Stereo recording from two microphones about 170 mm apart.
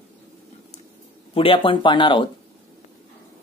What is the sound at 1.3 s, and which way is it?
Speech, 30° left (ahead or behind).